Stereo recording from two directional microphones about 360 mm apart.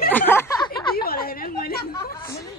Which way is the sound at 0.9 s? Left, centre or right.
Left.